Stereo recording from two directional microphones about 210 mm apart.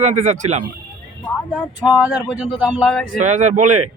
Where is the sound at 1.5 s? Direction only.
5° right (ahead or behind).